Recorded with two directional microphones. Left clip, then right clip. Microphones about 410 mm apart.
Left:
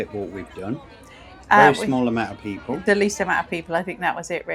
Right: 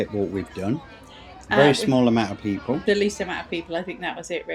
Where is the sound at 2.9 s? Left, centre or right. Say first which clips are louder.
Left 5 dB; centre.